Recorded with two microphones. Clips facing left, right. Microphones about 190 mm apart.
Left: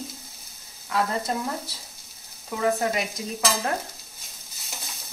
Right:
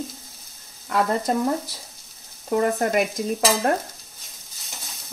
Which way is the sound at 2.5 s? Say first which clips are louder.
Right 4 dB; 55° right (ahead or behind).